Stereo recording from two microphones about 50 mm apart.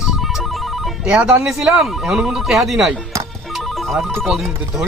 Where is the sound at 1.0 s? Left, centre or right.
Centre.